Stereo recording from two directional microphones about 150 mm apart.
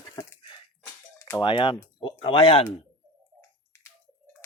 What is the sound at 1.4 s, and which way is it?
Speech, 35° left (ahead or behind).